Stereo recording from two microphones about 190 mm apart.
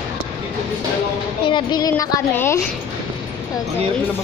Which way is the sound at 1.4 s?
25° left (ahead or behind).